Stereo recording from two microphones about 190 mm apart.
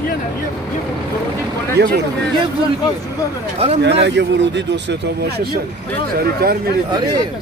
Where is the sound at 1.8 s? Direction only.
60° right (ahead or behind).